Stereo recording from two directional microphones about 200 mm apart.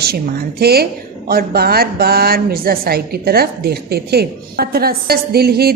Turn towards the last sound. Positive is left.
turn(degrees=-50)  # may be behind; listen again after turning